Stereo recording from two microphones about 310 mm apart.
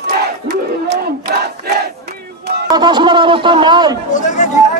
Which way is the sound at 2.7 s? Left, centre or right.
Centre.